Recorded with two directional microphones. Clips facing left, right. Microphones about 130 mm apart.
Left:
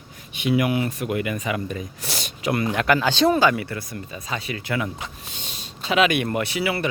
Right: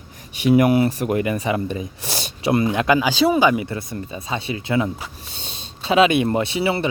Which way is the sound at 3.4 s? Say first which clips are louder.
Right 2 dB; 20° right (ahead or behind).